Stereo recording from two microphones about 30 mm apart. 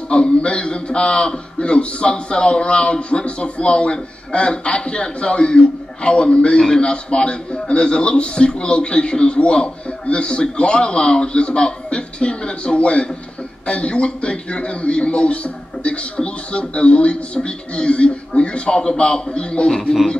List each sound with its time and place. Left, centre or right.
0.1 s a man's voice: left